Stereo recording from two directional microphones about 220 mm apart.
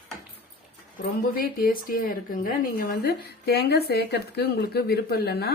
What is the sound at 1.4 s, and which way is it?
Speech, 45° left (ahead or behind).